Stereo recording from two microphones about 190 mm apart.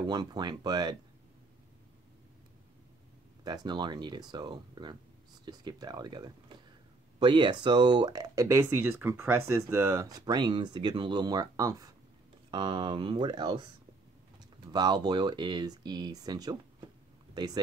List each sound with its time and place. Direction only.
0.0 s speech: 20° right (ahead or behind)
3.4 s speech: 20° right (ahead or behind)
17.3 s a sound: 20° right (ahead or behind)